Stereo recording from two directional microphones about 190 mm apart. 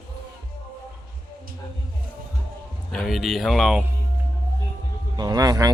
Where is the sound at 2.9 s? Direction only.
Centre (ahead or behind).